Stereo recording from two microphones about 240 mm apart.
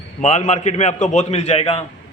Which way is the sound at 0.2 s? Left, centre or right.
Left.